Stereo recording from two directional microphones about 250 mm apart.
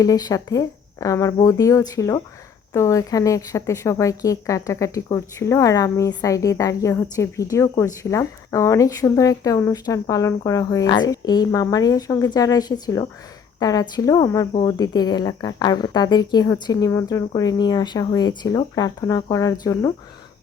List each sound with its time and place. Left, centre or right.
0.0 s a woman's voice: centre